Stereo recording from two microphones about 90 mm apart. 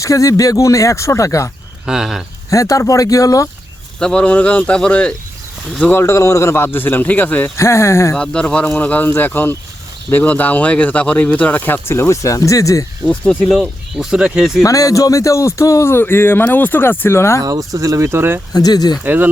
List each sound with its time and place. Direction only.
0.0 s speech: 40° left (ahead or behind)
1.9 s speech: 5° right (ahead or behind)
2.5 s speech: 35° left (ahead or behind)
4.0 s speech: 10° left (ahead or behind)
6.0 s speech: 30° left (ahead or behind); by 7.5 s 15° left (ahead or behind)
7.5 s speech: 30° left (ahead or behind)
8.1 s speech: 10° left (ahead or behind); by 12.8 s 40° left (ahead or behind)
13.4 s speech: centre (ahead or behind)
14.6 s speech: 40° left (ahead or behind)
17.4 s speech: 40° right (ahead or behind)
18.5 s speech: 45° left (ahead or behind)
19.0 s speech: 20° right (ahead or behind)